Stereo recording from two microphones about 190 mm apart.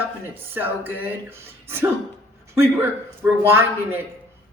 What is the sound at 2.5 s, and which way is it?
A woman's voice, 15° right (ahead or behind).